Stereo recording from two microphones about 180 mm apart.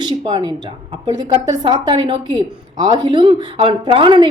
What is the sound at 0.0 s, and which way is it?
A woman's voice, 25° right (ahead or behind).